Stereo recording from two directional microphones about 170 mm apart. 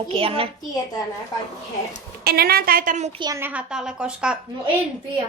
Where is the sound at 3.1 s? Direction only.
25° right (ahead or behind).